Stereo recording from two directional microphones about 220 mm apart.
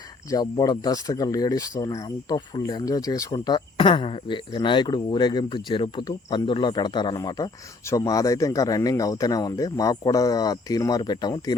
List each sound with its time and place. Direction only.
0.3 s speech: 15° left (ahead or behind)